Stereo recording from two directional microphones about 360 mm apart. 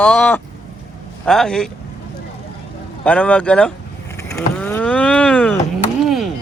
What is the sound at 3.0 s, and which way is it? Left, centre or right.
Speech, centre.